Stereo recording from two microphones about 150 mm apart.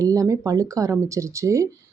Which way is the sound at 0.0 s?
20° right (ahead or behind).